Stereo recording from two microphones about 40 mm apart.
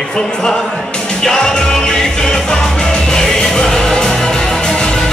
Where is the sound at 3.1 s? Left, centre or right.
Centre.